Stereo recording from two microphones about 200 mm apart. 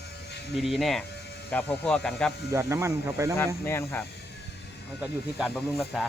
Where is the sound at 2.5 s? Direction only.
15° right (ahead or behind).